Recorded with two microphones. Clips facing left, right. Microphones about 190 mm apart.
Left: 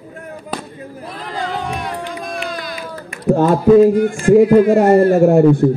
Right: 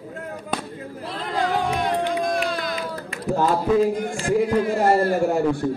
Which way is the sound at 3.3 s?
60° left (ahead or behind).